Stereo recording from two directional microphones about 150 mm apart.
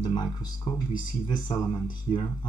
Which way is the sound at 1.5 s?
25° left (ahead or behind).